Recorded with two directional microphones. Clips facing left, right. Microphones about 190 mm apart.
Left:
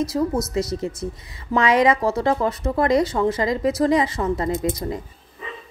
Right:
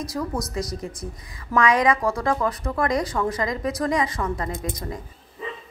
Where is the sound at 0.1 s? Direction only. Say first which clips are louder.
Left 6 dB; 25° left (ahead or behind).